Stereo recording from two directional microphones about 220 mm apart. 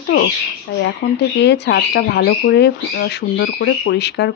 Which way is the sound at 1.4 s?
50° left (ahead or behind).